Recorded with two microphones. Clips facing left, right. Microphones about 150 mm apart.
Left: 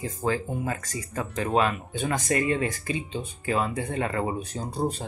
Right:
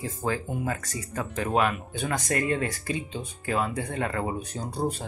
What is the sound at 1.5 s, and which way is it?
Speech, 10° right (ahead or behind).